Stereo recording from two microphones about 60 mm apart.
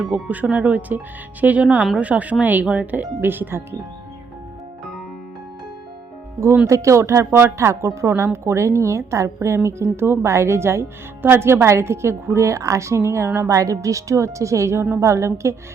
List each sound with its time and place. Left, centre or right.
0.1 s speech: right
6.7 s a woman's voice: right
9.9 s a woman's voice: right
13.5 s a woman's voice: right